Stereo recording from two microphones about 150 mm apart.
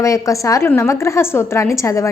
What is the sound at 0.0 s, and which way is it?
A woman's voice, 20° left (ahead or behind).